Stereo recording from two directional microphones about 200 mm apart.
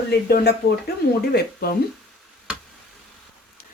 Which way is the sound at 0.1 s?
50° left (ahead or behind).